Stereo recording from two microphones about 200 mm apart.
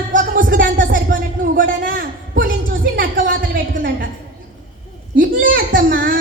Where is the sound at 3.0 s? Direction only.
45° right (ahead or behind).